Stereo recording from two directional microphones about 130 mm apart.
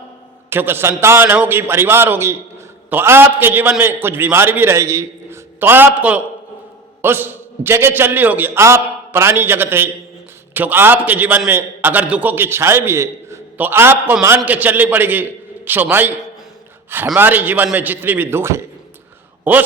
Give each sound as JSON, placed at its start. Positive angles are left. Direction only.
{"t": 0.5, "sound": "a man's voice", "side_deg": -15}
{"t": 17.2, "sound": "a man's voice", "side_deg": -15}